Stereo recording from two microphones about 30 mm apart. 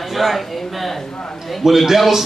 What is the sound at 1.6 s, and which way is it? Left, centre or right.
Speech, centre.